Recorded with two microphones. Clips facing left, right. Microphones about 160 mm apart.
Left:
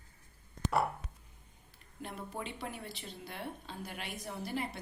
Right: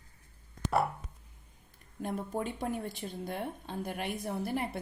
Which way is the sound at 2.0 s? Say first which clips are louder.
Right 7 dB; 45° right (ahead or behind).